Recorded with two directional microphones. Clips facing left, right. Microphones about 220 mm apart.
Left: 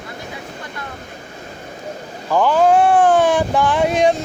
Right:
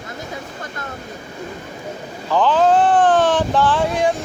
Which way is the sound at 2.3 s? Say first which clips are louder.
Left 1 dB; 10° left (ahead or behind).